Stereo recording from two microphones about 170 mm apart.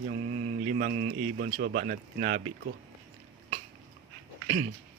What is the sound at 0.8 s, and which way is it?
Speech, 45° right (ahead or behind).